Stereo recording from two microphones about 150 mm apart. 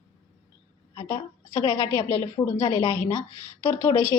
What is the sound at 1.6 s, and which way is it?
A woman's voice, 15° left (ahead or behind).